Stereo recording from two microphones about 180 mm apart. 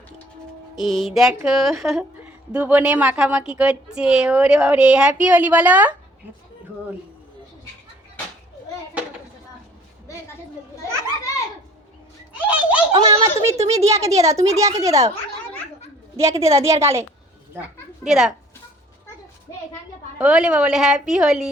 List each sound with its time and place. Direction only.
0.9 s a woman's voice: centre (ahead or behind)
12.3 s a sound: 10° right (ahead or behind)
12.9 s speech: 25° right (ahead or behind)
13.2 s a woman's voice: 15° right (ahead or behind)
16.1 s a woman's voice: 15° right (ahead or behind)
18.0 s a child's voice: 5° right (ahead or behind)
20.1 s a woman's voice: 5° right (ahead or behind)